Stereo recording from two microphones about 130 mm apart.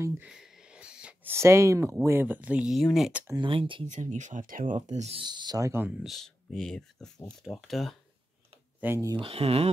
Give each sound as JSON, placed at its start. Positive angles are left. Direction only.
{"t": 0.2, "sound": "wheeze", "side_deg": -5}
{"t": 1.3, "sound": "speech", "side_deg": -20}
{"t": 3.3, "sound": "speech", "side_deg": -40}
{"t": 3.8, "sound": "speech", "side_deg": -70}
{"t": 4.7, "sound": "speech", "side_deg": -60}
{"t": 5.2, "sound": "speech", "side_deg": -35}
{"t": 6.0, "sound": "speech", "side_deg": 0}
{"t": 8.8, "sound": "speech", "side_deg": -15}
{"t": 9.2, "sound": "speech", "side_deg": -45}